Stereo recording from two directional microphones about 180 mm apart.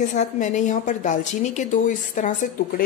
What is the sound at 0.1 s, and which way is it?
A woman's voice, 40° left (ahead or behind).